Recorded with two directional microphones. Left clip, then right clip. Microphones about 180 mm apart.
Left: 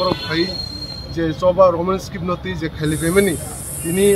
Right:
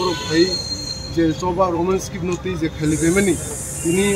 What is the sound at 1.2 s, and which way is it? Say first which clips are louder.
Speech: left 5 dB; 15° left (ahead or behind).